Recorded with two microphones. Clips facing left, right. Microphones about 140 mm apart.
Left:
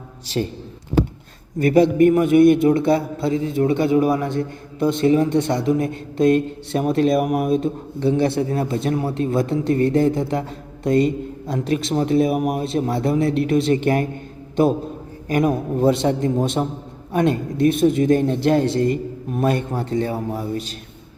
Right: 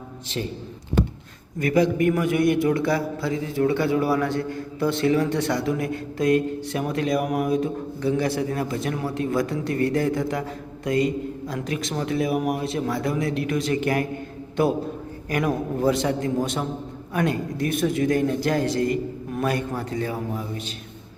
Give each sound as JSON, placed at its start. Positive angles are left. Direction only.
{"t": 1.5, "sound": "a man's voice", "side_deg": 30}
{"t": 15.3, "sound": "a man's voice", "side_deg": 25}